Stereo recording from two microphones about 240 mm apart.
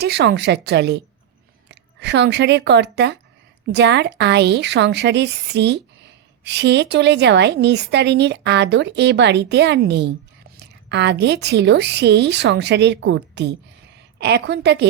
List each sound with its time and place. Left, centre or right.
0.0 s a woman's voice: right